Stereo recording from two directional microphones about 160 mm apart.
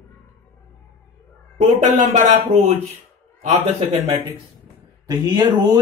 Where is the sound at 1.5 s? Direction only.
50° right (ahead or behind).